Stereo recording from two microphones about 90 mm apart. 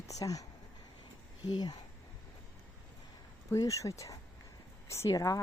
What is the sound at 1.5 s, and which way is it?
Speech, 55° left (ahead or behind).